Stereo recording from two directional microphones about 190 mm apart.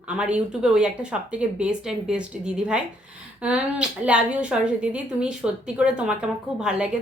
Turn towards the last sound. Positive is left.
turn(degrees=-5)  # may be behind; listen again after turning